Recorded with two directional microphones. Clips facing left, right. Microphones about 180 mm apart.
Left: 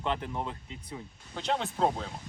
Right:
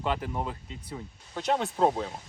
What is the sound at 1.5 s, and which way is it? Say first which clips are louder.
Speech: right 3 dB; 40° right (ahead or behind).